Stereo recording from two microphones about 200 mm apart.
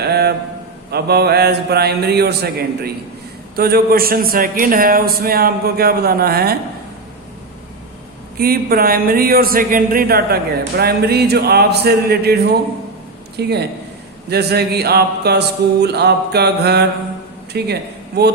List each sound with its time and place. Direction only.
0.1 s a sound: 55° right (ahead or behind)
0.9 s a man's voice: 55° right (ahead or behind)
8.4 s a man's voice: 50° right (ahead or behind)
13.3 s mantra: 55° right (ahead or behind)